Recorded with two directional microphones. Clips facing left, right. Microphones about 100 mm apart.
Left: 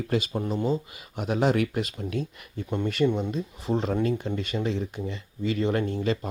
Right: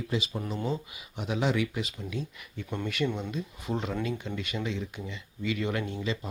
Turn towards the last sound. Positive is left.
turn(degrees=45)  # may be behind; listen again after turning